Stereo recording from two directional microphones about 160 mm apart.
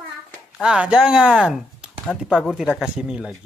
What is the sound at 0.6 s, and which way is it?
Speech, 5° right (ahead or behind).